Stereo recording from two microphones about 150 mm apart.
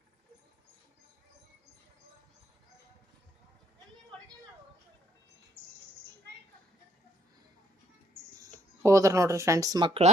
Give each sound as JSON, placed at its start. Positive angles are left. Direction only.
{"t": 8.8, "sound": "speech", "side_deg": -20}